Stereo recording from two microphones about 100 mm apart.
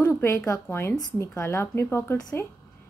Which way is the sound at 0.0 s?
30° left (ahead or behind).